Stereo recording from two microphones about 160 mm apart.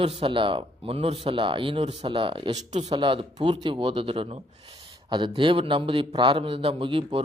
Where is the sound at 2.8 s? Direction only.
30° right (ahead or behind).